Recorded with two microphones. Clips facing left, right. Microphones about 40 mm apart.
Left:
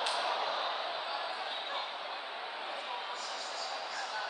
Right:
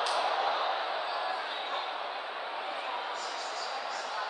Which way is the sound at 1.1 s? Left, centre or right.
Centre.